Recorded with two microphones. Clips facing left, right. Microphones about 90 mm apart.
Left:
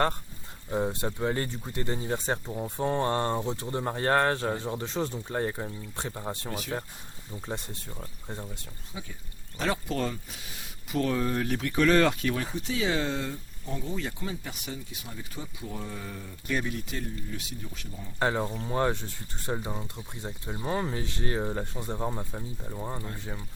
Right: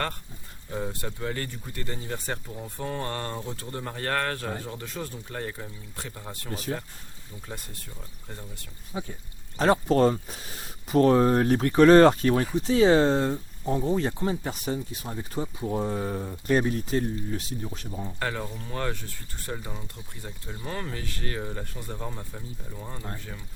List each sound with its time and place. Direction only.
0.7 s speech: 20° left (ahead or behind)
6.5 s speech: 35° right (ahead or behind)
7.4 s speech: 25° left (ahead or behind)
8.9 s speech: 40° right (ahead or behind)
18.2 s speech: 25° left (ahead or behind)